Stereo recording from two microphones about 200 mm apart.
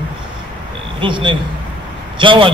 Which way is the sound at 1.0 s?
25° right (ahead or behind).